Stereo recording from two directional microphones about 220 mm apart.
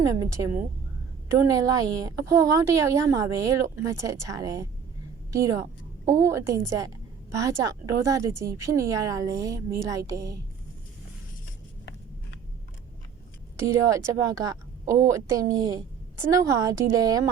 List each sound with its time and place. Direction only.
0.0 s a woman's voice: 15° right (ahead or behind)
13.6 s a woman's voice: 15° right (ahead or behind)